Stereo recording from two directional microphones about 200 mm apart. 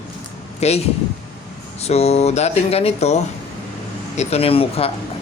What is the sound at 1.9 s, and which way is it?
Speech, 30° left (ahead or behind).